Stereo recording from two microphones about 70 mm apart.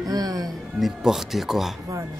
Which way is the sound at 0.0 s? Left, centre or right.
Right.